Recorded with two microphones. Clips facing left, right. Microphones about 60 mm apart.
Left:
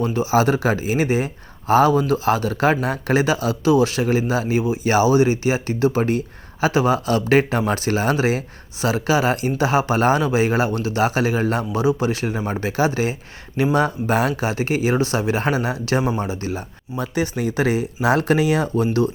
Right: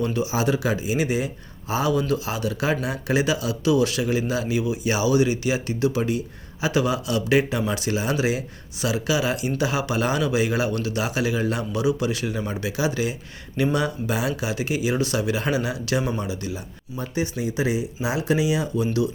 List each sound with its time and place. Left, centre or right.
0.0 s a man's voice: left
17.0 s speech: left